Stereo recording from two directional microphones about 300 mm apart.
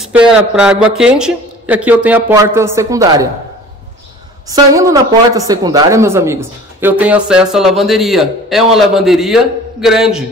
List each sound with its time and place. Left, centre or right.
0.0 s speech: centre
4.5 s speech: centre